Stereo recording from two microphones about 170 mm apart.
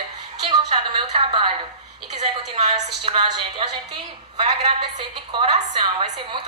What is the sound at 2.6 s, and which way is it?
Speech, 40° right (ahead or behind).